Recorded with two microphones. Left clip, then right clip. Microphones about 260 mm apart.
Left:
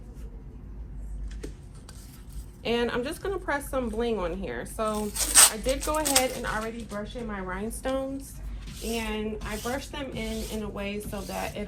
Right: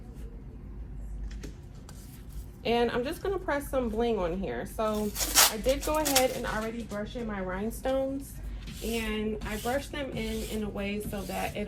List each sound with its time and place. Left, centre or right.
2.6 s a woman's voice: left